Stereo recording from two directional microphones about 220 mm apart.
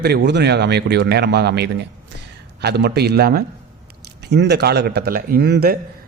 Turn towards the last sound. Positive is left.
turn(degrees=-45)  # may be behind; listen again after turning